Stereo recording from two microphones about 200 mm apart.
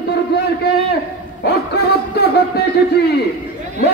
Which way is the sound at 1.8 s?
55° left (ahead or behind).